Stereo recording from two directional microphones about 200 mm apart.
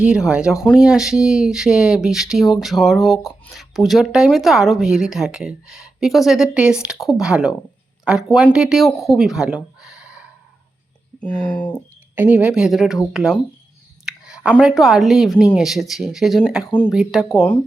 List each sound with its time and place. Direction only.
0.0 s speech: 5° right (ahead or behind)
3.2 s speech: 15° left (ahead or behind)
3.5 s speech: centre (ahead or behind)
9.8 s a sound: 5° right (ahead or behind)
11.2 s speech: 5° left (ahead or behind)
12.1 s speech: 10° right (ahead or behind)
14.0 s a sound: 5° right (ahead or behind)
14.6 s speech: centre (ahead or behind)